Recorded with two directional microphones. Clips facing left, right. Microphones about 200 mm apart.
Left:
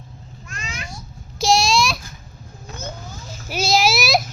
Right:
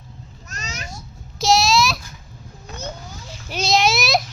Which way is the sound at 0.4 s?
40° right (ahead or behind).